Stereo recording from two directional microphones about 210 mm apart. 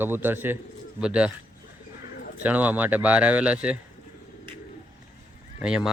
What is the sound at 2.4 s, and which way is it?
Speech, 5° right (ahead or behind).